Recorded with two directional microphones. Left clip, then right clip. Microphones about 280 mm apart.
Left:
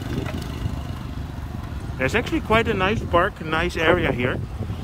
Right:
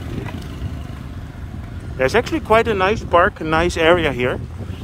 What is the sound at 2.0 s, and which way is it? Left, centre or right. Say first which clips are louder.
Speech: right 5 dB; centre.